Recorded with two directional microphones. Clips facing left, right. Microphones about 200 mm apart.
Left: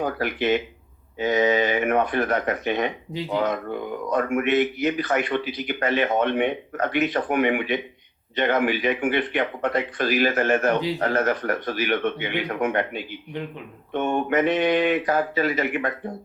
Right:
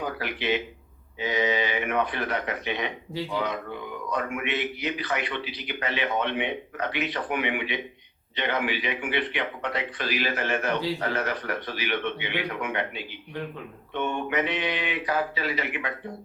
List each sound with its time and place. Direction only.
0.0 s speech: 50° left (ahead or behind)